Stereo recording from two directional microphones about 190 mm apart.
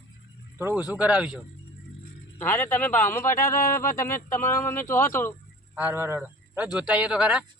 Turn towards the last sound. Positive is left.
turn(degrees=-5)  # may be behind; listen again after turning